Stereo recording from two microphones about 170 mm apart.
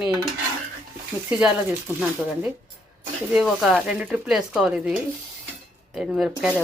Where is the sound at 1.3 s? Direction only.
5° right (ahead or behind).